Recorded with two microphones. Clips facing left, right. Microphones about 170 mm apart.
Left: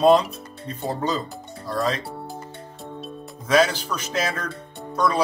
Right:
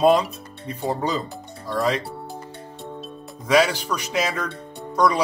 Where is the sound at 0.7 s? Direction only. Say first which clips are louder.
Right 1 dB; 15° right (ahead or behind).